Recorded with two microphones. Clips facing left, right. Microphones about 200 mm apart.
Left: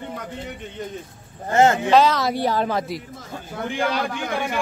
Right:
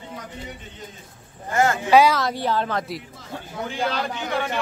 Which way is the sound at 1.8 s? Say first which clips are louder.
Even; 10° right (ahead or behind).